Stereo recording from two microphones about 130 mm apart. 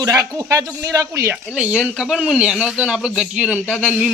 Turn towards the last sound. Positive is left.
turn(degrees=5)  # may be behind; listen again after turning